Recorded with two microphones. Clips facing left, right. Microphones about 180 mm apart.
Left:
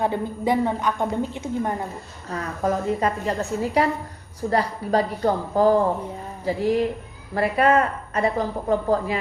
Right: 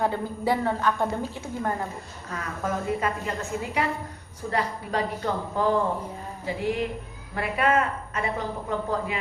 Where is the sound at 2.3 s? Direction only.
35° left (ahead or behind).